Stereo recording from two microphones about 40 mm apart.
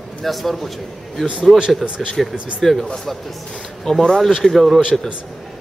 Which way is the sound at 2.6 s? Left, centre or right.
Centre.